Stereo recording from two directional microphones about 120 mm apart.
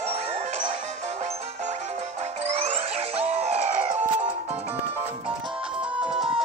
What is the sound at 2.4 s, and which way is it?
Music, 70° right (ahead or behind).